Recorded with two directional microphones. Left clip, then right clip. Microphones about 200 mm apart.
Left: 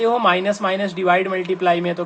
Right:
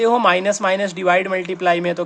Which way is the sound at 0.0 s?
30° right (ahead or behind).